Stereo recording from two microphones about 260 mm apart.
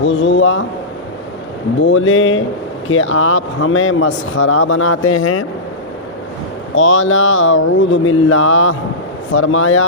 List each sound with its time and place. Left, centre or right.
0.0 s speech: left
1.8 s speech: left
5.1 s speech: left
6.7 s speech: left